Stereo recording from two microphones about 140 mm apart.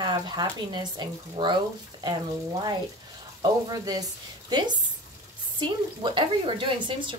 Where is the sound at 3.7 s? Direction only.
25° right (ahead or behind).